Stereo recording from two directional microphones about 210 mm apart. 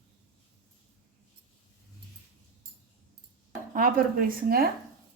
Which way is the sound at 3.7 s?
40° right (ahead or behind).